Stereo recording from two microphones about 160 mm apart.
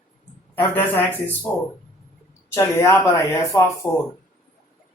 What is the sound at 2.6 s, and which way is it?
Speech, 15° left (ahead or behind).